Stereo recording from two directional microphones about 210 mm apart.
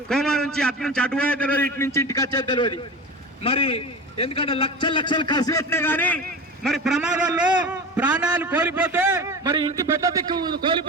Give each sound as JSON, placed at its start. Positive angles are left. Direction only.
{"t": 0.1, "sound": "a man's voice", "side_deg": 5}